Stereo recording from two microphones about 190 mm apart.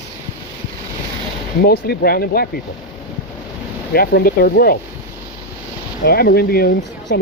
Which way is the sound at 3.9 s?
55° left (ahead or behind).